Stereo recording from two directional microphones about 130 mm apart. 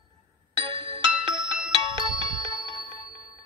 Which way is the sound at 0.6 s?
40° right (ahead or behind).